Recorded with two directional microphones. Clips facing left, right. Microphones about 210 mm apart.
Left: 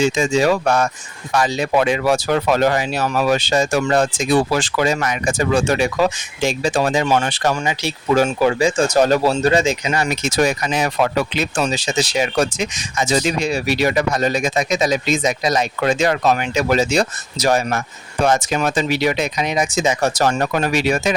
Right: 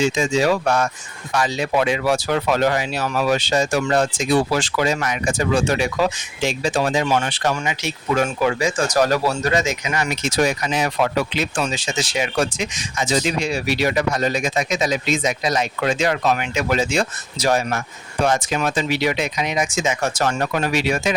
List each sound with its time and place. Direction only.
0.2 s speech: 45° left (ahead or behind)